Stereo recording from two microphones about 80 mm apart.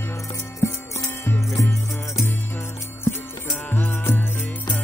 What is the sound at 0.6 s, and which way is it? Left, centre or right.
Music, left.